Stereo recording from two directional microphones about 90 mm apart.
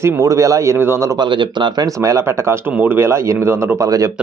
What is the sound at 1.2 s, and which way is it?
Speech, 60° right (ahead or behind).